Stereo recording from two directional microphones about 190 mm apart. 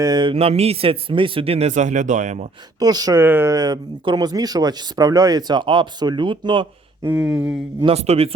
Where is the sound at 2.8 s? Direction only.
20° right (ahead or behind).